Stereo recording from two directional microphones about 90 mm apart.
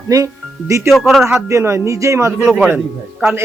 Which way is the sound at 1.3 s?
30° right (ahead or behind).